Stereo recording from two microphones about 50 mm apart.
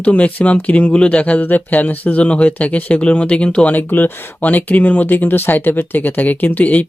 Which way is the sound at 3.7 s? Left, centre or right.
Left.